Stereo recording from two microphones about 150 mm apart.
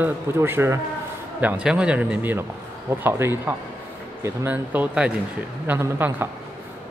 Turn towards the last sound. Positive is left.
turn(degrees=-15)  # may be behind; listen again after turning